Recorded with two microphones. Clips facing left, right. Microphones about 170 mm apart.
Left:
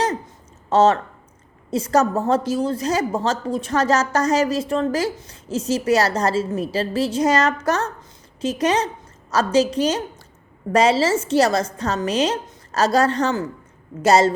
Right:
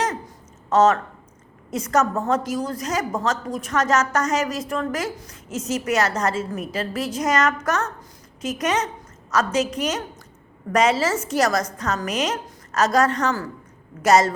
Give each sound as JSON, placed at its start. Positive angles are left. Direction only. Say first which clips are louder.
{"t": 0.7, "sound": "a woman's voice", "louder": "left 1 dB", "side_deg": 30}